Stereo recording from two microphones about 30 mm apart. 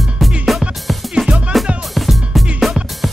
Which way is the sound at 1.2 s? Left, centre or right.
Centre.